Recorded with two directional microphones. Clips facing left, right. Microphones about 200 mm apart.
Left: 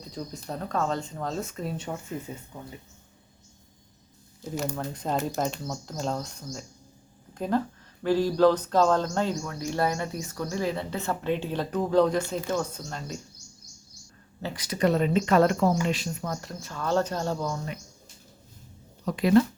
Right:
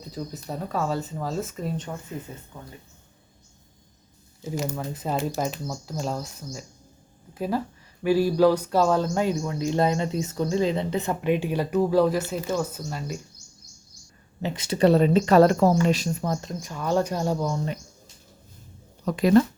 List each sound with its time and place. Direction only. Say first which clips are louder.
0.1 s speech: right 2 dB; 5° right (ahead or behind)
2.3 s speech: left 2 dB; 15° left (ahead or behind)
4.4 s speech: right 2 dB; 5° right (ahead or behind)
14.4 s speech: right 5 dB; 25° right (ahead or behind)
19.0 s speech: right 3 dB; 45° right (ahead or behind)